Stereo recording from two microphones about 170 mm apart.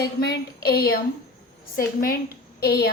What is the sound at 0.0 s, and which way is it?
A woman's voice, 65° left (ahead or behind).